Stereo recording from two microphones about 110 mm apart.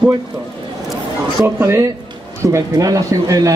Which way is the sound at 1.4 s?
25° right (ahead or behind).